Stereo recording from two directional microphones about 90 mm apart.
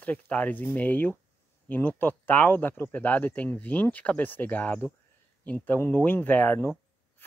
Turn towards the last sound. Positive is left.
turn(degrees=25)  # may be behind; listen again after turning